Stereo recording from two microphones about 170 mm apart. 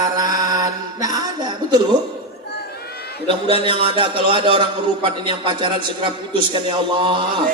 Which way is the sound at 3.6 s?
30° right (ahead or behind).